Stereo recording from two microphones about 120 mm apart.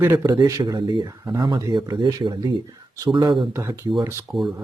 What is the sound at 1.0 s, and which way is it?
Speech, 30° right (ahead or behind).